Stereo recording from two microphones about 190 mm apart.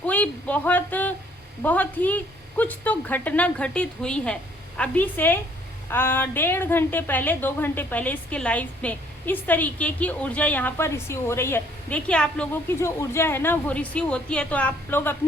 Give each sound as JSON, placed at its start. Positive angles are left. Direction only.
{"t": 0.0, "sound": "a woman's voice", "side_deg": 10}